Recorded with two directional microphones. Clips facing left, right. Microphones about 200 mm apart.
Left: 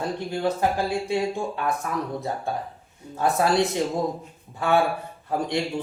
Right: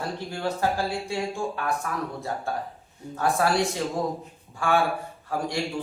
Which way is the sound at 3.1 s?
20° left (ahead or behind).